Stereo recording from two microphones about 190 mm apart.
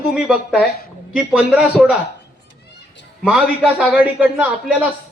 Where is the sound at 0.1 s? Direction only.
5° right (ahead or behind).